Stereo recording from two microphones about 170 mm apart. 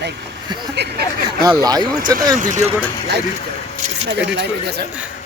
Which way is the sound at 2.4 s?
45° right (ahead or behind).